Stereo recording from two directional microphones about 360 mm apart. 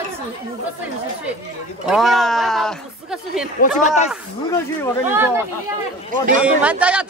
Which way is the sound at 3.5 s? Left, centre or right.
Centre.